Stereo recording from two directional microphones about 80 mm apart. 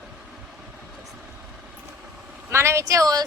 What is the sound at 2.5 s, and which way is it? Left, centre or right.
Speech, right.